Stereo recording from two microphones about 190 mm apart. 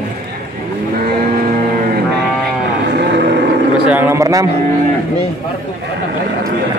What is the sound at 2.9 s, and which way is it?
Vehicle, 60° right (ahead or behind).